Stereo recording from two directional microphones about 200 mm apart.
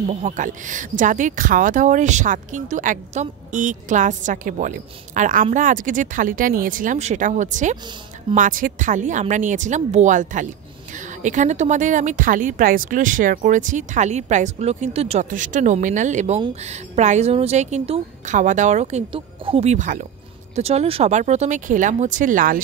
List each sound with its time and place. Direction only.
0.1 s a woman's voice: 35° right (ahead or behind)